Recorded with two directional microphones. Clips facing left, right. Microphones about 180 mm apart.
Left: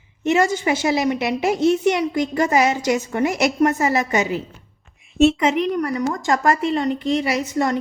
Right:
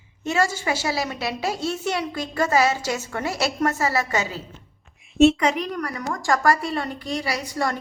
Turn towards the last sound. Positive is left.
turn(degrees=20)  # may be behind; listen again after turning